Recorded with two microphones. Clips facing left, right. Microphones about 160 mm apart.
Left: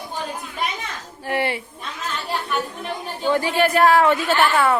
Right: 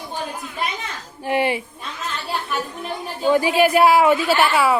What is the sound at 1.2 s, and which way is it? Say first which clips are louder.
Speech: right 3 dB; 15° right (ahead or behind).